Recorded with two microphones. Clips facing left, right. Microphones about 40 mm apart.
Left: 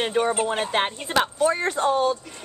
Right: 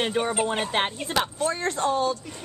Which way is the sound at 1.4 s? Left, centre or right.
Centre.